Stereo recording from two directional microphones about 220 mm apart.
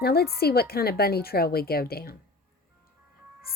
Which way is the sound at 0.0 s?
45° left (ahead or behind).